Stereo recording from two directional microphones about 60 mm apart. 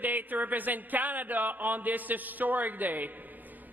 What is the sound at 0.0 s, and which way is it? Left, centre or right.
A man's voice, right.